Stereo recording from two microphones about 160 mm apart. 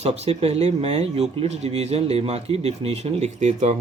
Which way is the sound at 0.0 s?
40° right (ahead or behind).